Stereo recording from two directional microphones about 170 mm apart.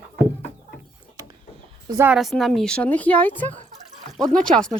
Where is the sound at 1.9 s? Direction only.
15° right (ahead or behind).